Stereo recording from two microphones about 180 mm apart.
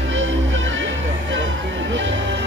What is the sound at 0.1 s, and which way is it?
Music, 90° right.